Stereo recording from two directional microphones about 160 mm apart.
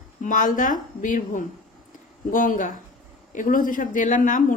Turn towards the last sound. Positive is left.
turn(degrees=55)  # may be behind; listen again after turning